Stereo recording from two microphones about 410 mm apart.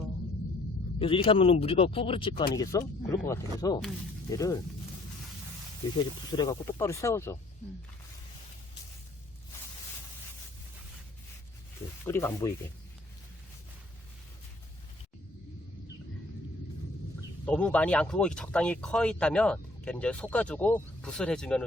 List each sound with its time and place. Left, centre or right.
0.9 s speech: centre
6.3 s speech: centre
12.0 s speech: centre
17.4 s speech: centre